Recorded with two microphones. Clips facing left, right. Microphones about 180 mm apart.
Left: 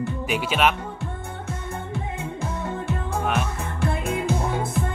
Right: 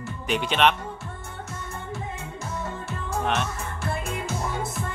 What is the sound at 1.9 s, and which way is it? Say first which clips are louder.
Music: left 3 dB; 60° left (ahead or behind).